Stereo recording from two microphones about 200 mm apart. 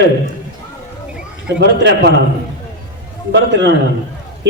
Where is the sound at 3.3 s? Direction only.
60° right (ahead or behind).